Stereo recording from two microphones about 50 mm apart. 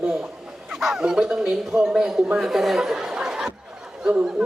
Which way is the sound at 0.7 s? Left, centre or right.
Centre.